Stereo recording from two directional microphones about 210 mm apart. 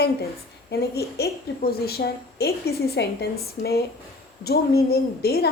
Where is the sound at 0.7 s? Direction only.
50° left (ahead or behind).